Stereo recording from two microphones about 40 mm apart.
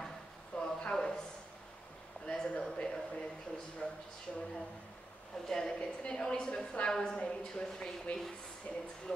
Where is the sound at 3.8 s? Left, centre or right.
Left.